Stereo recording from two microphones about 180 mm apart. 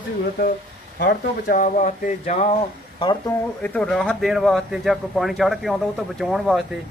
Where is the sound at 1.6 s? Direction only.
45° left (ahead or behind).